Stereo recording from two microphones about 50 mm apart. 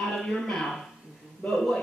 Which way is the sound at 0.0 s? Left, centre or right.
Centre.